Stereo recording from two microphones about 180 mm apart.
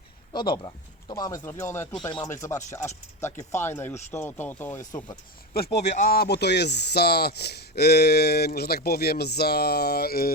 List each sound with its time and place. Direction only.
0.3 s speech: 25° left (ahead or behind)
5.5 s speech: 60° left (ahead or behind)
5.9 s speech: 50° left (ahead or behind)